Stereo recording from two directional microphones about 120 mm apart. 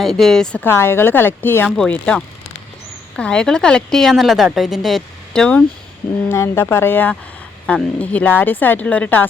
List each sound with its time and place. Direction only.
0.0 s a woman's voice: centre (ahead or behind)
0.6 s speech: 20° left (ahead or behind)
1.7 s a woman's voice: 5° left (ahead or behind)
6.2 s speech: 20° left (ahead or behind)